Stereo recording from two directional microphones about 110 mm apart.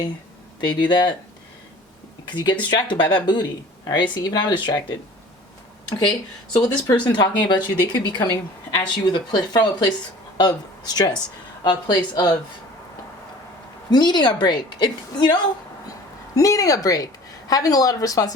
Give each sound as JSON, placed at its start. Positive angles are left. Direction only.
{"t": 0.6, "sound": "speech", "side_deg": 45}
{"t": 2.4, "sound": "speech", "side_deg": 45}
{"t": 6.6, "sound": "speech", "side_deg": 40}
{"t": 13.9, "sound": "speech", "side_deg": 40}